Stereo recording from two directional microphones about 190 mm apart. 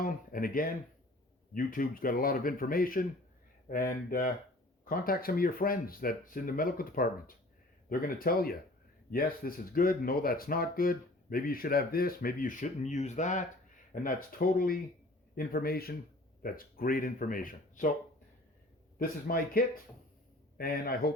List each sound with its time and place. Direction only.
0.0 s speech: 50° left (ahead or behind)
19.3 s speech: 50° left (ahead or behind)
20.6 s speech: 50° left (ahead or behind)